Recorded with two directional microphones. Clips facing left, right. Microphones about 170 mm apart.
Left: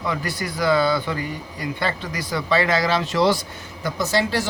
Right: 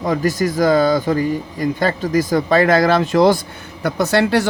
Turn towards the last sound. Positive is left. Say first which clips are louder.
# right 6 dB
turn(degrees=-65)  # may be behind; listen again after turning